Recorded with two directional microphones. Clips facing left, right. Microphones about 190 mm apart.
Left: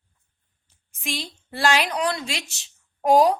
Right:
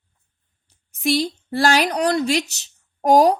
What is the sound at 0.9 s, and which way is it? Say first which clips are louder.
A woman's voice: right 12 dB; 40° right (ahead or behind).